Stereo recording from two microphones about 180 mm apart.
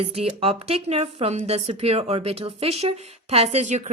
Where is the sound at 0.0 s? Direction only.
35° right (ahead or behind).